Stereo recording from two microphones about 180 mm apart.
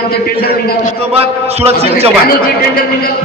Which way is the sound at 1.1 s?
35° right (ahead or behind).